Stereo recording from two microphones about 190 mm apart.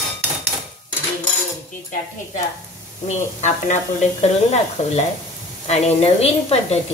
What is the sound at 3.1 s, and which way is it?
Speech, 40° left (ahead or behind).